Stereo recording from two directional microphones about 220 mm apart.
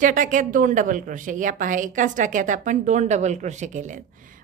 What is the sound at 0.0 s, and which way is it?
A woman's voice, 35° right (ahead or behind).